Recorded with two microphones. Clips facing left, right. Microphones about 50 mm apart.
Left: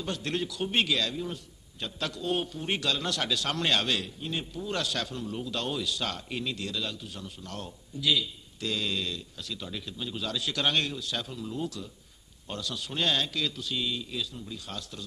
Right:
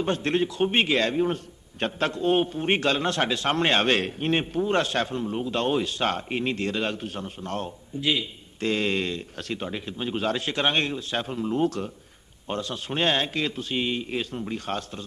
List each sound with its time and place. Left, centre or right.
0.0 s a man's voice: right
12.4 s a man's voice: right